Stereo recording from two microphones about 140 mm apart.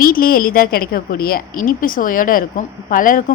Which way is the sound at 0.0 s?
90° left.